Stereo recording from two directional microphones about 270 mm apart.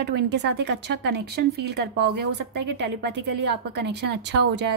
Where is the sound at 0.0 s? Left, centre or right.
Right.